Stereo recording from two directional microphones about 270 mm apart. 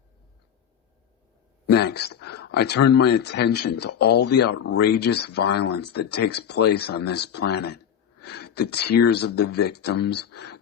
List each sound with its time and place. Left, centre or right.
1.6 s speech: left